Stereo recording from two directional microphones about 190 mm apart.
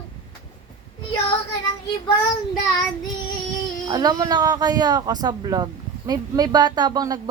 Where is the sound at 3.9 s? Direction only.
20° right (ahead or behind).